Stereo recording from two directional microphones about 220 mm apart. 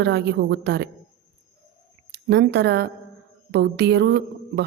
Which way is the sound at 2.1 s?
50° right (ahead or behind).